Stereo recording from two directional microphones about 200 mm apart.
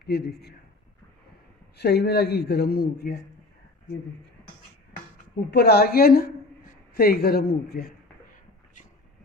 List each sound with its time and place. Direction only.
0.0 s speech: 55° left (ahead or behind)
1.8 s speech: 55° left (ahead or behind)
5.5 s speech: 55° left (ahead or behind)